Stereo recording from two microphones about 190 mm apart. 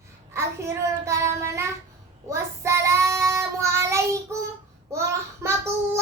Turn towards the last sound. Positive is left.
turn(degrees=-15)  # may be behind; listen again after turning